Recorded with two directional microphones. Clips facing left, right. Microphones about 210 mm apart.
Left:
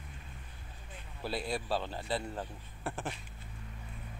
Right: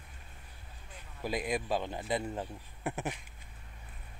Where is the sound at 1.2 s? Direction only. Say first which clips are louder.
Right 2 dB; 15° right (ahead or behind).